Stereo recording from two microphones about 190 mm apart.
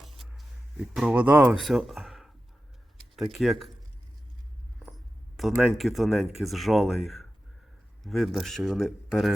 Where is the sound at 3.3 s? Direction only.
Centre (ahead or behind).